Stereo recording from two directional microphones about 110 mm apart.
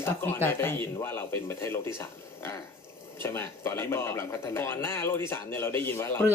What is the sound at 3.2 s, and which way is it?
Speech, 20° left (ahead or behind).